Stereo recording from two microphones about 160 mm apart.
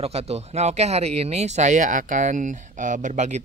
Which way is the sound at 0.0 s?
40° right (ahead or behind).